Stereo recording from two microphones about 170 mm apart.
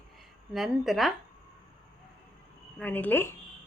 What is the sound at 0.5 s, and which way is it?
Speech, centre (ahead or behind).